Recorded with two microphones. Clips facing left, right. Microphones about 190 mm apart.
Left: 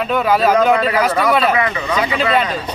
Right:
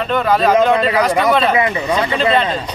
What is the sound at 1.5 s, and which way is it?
Speech, 25° right (ahead or behind).